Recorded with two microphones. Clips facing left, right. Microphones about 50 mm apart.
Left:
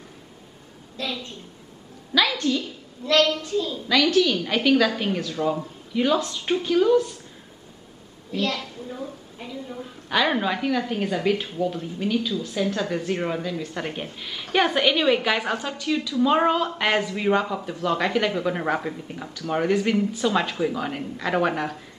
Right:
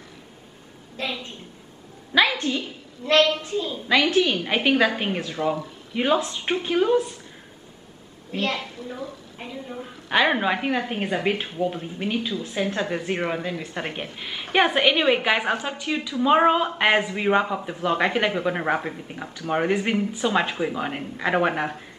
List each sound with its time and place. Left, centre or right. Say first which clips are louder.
0.9 s a woman's voice: right 1 dB; right
8.3 s a woman's voice: even; right
8.8 s a woman's voice: even; right
9.4 s a woman's voice: even; right